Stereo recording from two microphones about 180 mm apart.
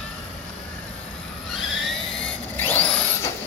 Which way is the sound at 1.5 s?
Centre (ahead or behind).